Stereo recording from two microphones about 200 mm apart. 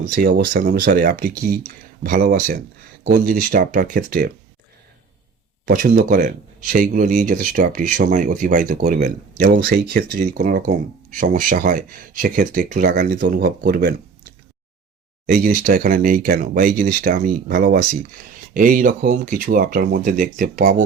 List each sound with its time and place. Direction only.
0.0 s speech: 45° right (ahead or behind)
5.6 s speech: 45° right (ahead or behind)